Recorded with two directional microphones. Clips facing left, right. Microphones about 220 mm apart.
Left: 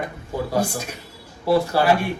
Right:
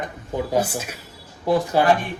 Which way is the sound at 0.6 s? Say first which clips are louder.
Left 2 dB; 5° right (ahead or behind).